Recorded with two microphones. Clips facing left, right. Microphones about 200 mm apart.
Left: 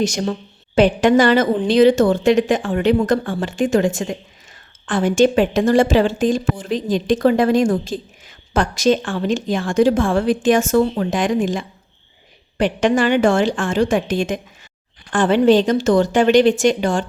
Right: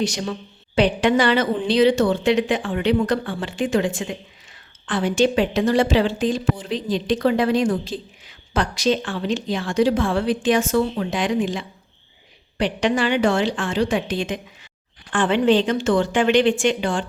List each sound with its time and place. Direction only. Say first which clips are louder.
0.0 s a woman's voice: left 4 dB; 45° left (ahead or behind)